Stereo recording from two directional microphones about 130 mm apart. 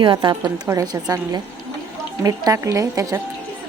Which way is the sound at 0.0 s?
40° right (ahead or behind).